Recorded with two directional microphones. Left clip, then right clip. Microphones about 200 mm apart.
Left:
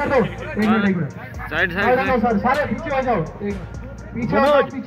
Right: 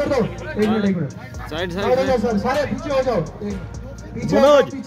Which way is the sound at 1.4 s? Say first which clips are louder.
Left 3 dB; 30° right (ahead or behind).